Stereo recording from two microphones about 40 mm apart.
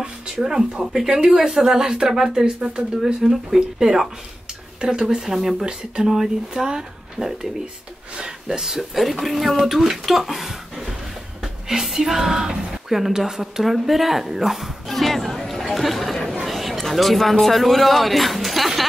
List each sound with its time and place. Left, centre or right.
0.4 s a woman's voice: centre
2.4 s speech: right
3.0 s a woman's voice: centre
14.9 s chatter: centre
16.4 s a sound: centre